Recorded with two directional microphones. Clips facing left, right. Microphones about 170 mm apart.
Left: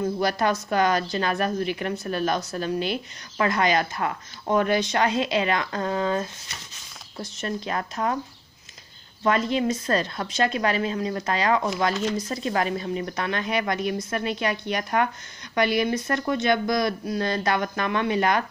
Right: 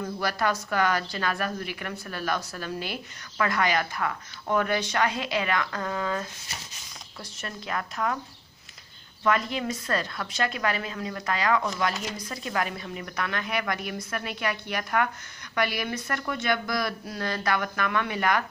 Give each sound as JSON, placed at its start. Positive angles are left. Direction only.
{"t": 0.0, "sound": "speech", "side_deg": 20}
{"t": 9.2, "sound": "speech", "side_deg": 25}